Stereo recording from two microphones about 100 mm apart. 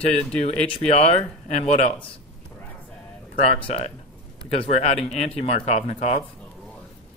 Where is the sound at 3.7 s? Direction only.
90° left.